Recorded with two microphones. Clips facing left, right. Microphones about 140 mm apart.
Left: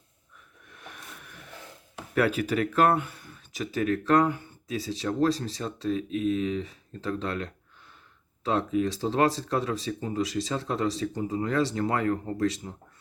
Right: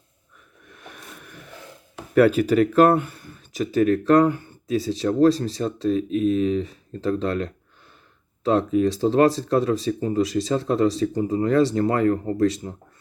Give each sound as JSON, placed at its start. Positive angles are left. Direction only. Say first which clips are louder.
{"t": 2.1, "sound": "speech", "louder": "right 9 dB", "side_deg": -40}